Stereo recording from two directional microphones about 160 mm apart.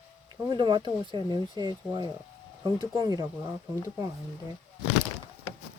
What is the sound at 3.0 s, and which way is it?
Speech, 25° right (ahead or behind).